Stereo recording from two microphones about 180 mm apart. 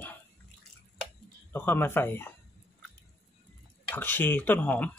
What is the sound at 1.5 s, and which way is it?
Speech, 10° left (ahead or behind).